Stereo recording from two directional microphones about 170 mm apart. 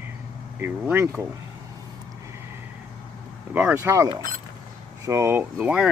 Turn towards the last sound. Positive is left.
turn(degrees=-5)  # may be behind; listen again after turning